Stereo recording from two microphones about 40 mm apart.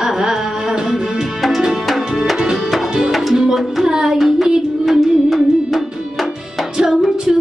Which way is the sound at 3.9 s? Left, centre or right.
Centre.